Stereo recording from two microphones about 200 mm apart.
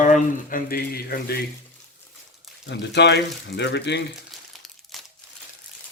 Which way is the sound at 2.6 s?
60° left (ahead or behind).